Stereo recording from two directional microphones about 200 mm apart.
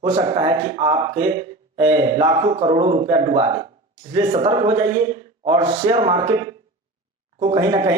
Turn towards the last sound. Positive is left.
turn(degrees=-25)  # may be behind; listen again after turning